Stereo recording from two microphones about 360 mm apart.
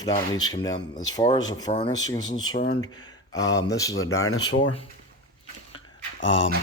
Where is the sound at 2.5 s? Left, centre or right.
Left.